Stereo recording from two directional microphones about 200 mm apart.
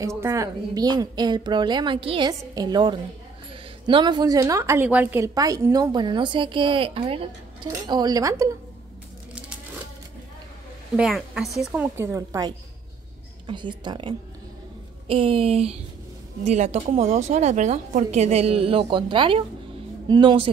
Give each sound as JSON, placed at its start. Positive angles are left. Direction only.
{"t": 0.0, "sound": "a woman's voice", "side_deg": -15}
{"t": 11.0, "sound": "a woman's voice", "side_deg": 0}